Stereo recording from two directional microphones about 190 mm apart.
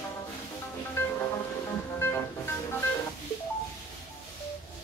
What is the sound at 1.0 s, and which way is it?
Music, 10° left (ahead or behind).